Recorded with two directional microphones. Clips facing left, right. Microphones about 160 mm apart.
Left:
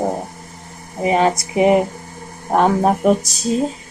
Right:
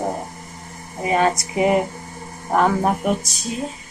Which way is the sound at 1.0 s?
20° left (ahead or behind).